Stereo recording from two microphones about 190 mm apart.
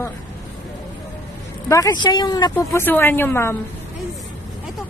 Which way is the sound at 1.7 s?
20° left (ahead or behind).